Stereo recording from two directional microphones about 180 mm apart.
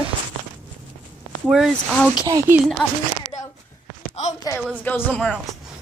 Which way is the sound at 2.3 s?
20° right (ahead or behind).